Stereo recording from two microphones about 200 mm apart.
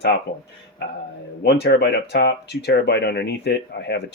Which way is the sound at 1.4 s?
55° left (ahead or behind).